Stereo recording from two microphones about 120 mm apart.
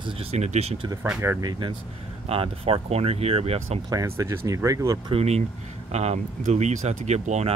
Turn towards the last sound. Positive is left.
turn(degrees=-70)  # may be behind; listen again after turning